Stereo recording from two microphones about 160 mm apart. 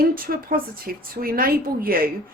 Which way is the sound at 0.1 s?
65° right (ahead or behind).